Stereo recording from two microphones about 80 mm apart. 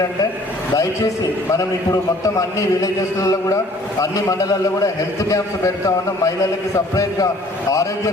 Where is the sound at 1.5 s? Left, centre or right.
Left.